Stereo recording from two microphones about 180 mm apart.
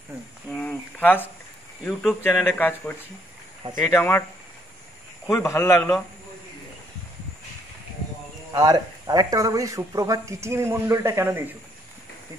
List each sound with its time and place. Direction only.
0.5 s a sound: 5° left (ahead or behind)
1.9 s speech: 5° left (ahead or behind)
3.9 s speech: 15° left (ahead or behind)
5.2 s speech: 15° left (ahead or behind)
8.5 s speech: 20° right (ahead or behind)